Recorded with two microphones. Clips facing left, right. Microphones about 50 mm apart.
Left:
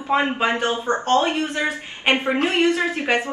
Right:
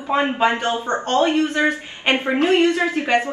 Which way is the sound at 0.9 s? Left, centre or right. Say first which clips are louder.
Right 1 dB; left.